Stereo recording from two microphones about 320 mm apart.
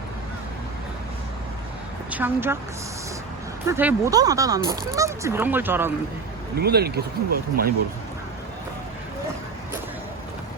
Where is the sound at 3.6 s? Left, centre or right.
Centre.